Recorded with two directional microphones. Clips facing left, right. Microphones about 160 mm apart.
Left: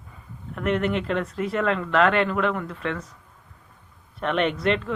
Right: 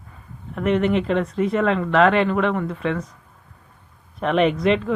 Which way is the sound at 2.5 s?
30° right (ahead or behind).